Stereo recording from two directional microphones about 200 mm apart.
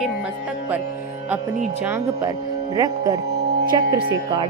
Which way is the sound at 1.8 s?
15° right (ahead or behind).